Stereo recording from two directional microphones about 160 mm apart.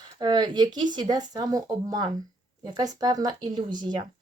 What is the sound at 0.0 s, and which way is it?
Speech, 25° right (ahead or behind).